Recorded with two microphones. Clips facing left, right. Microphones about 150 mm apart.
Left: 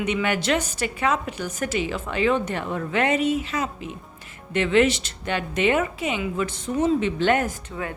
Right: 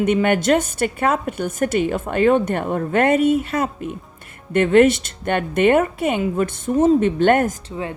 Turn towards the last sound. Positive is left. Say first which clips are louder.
# right 4 dB
turn(degrees=-25)  # may be behind; listen again after turning